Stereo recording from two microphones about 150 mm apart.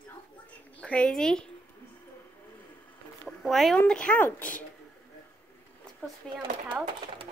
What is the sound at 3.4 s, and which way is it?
A woman's voice, centre (ahead or behind).